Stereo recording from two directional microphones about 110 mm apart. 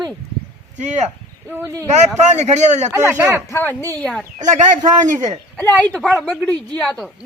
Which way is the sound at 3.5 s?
20° left (ahead or behind).